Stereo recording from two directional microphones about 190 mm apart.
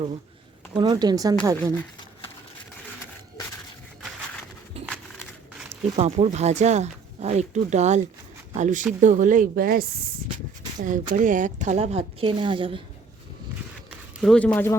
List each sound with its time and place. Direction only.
0.7 s speech: 25° right (ahead or behind)
4.9 s a sound: centre (ahead or behind)
6.0 s speech: 35° right (ahead or behind)
14.2 s speech: 5° left (ahead or behind)